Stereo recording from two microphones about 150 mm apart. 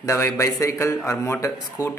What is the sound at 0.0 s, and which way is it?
A man's voice, 20° left (ahead or behind).